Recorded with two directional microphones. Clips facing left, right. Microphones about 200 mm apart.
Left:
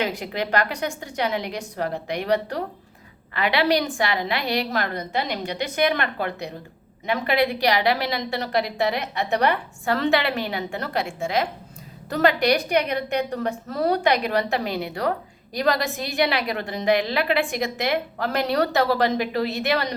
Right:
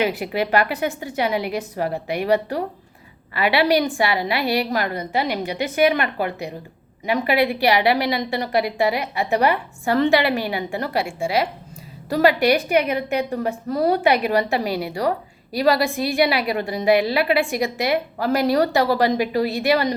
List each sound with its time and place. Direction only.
0.0 s a woman's voice: 5° right (ahead or behind)